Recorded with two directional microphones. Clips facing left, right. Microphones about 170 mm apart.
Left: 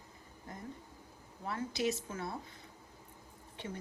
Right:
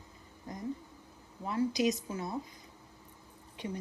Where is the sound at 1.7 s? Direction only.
15° right (ahead or behind).